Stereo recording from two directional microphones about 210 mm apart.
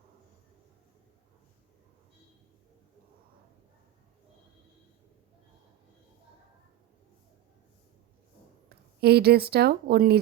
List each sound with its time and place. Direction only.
9.0 s speech: 50° right (ahead or behind)